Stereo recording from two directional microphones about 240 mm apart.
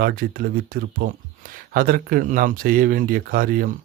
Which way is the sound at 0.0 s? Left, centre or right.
Right.